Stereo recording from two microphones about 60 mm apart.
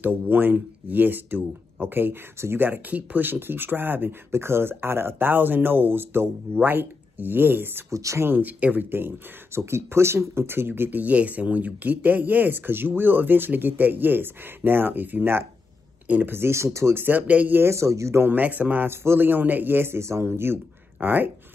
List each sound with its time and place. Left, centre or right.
0.0 s speech: right
4.3 s speech: right
7.9 s speech: right
8.2 s speech: right
8.9 s speech: right
17.0 s speech: right
17.6 s speech: right
18.2 s speech: right
18.9 s speech: right